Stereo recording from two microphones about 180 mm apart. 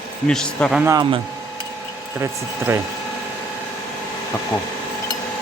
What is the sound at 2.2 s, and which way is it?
Speech, 15° right (ahead or behind).